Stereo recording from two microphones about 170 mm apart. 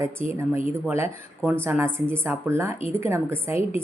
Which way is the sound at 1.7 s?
15° right (ahead or behind).